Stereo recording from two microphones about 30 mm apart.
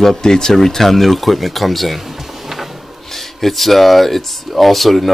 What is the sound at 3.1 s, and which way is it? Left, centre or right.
Speech, centre.